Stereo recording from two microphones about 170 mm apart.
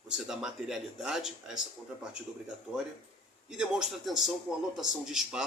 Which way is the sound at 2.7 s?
5° right (ahead or behind).